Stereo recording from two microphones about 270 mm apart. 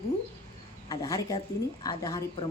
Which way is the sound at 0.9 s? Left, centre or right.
Centre.